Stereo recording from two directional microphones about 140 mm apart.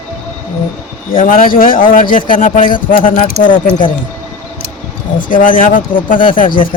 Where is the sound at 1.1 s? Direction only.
75° left (ahead or behind).